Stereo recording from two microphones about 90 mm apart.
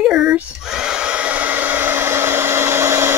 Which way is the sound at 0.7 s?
10° right (ahead or behind).